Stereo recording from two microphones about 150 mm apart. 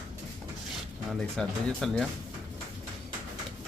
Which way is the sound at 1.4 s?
5° left (ahead or behind).